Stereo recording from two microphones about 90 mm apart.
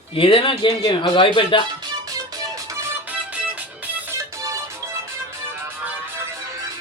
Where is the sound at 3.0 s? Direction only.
15° right (ahead or behind).